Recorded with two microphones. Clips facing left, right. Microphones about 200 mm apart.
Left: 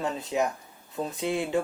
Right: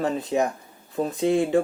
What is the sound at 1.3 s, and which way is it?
Speech, 45° right (ahead or behind).